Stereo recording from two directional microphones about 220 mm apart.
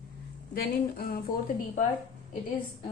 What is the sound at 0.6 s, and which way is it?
Speech, 40° left (ahead or behind).